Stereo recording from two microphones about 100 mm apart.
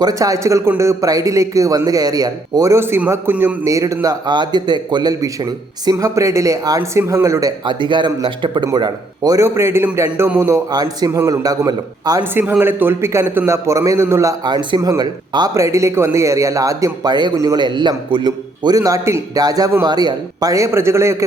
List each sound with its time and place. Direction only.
0.0 s a man's voice: 35° right (ahead or behind)
3.7 s speech: 35° right (ahead or behind)
4.3 s speech: 45° right (ahead or behind)
7.6 s speech: 50° right (ahead or behind); by 10.6 s 25° right (ahead or behind)
10.7 s speech: 40° right (ahead or behind)
12.2 s a man's voice: 20° right (ahead or behind)
14.4 s speech: 45° right (ahead or behind)
15.5 s speech: 30° right (ahead or behind); by 18.8 s 45° right (ahead or behind)
18.8 s speech: 30° right (ahead or behind)